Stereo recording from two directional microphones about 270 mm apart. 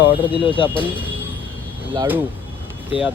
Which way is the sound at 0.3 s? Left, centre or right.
Centre.